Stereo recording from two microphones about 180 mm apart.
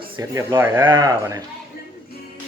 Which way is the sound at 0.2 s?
15° right (ahead or behind).